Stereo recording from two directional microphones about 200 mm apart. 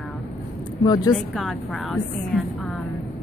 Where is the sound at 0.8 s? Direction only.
20° left (ahead or behind).